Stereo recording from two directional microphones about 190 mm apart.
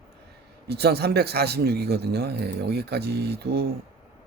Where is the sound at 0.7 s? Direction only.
60° right (ahead or behind).